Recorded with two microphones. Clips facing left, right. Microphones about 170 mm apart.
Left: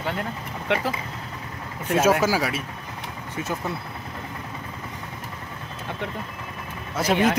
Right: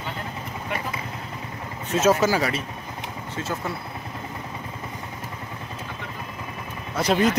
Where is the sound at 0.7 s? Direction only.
90° left.